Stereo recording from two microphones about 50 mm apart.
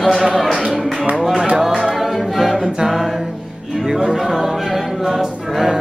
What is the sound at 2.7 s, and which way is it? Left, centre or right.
Music, centre.